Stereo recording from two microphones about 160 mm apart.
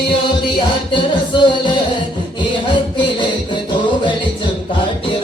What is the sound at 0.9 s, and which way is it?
Music, 30° left (ahead or behind).